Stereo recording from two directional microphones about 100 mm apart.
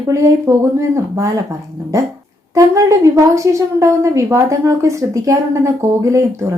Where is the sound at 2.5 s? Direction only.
30° right (ahead or behind).